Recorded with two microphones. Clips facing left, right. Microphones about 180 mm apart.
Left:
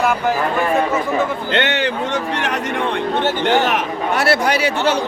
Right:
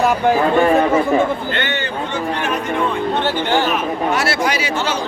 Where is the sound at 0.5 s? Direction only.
30° right (ahead or behind).